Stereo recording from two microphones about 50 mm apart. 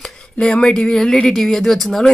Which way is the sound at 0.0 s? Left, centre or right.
Centre.